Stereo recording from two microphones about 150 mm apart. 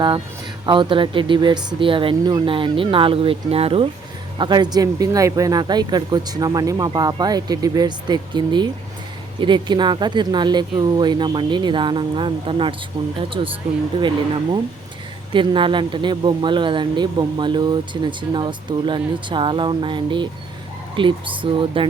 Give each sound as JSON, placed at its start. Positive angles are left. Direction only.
{"t": 0.6, "sound": "speech", "side_deg": -30}
{"t": 4.4, "sound": "speech", "side_deg": -30}
{"t": 15.3, "sound": "speech", "side_deg": -35}